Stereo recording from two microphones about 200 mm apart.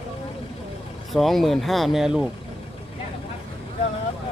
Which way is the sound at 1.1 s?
Centre (ahead or behind).